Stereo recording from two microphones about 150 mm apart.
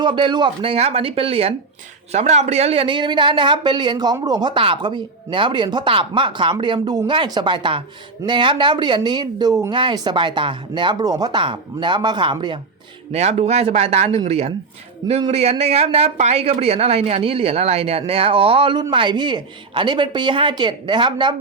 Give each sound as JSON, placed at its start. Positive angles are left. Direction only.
{"t": 0.0, "sound": "speech", "side_deg": -30}
{"t": 13.1, "sound": "speech", "side_deg": -45}